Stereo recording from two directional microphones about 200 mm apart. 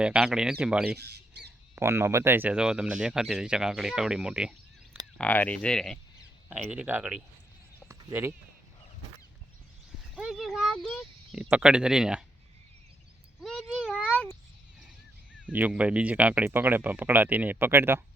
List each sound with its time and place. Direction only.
0.0 s speech: 5° right (ahead or behind)
0.9 s speech: 55° right (ahead or behind)
1.4 s speech: 15° right (ahead or behind)
5.1 s speech: 5° left (ahead or behind)
7.9 s sheep: 10° right (ahead or behind)
10.2 s a sound: centre (ahead or behind)
13.4 s a sound: centre (ahead or behind)
15.5 s speech: 5° right (ahead or behind)